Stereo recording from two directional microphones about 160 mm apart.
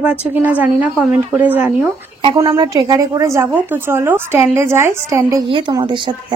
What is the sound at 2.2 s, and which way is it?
A woman's voice, 30° right (ahead or behind).